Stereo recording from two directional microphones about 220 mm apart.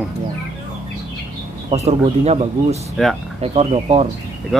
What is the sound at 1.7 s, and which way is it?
Speech, 30° right (ahead or behind).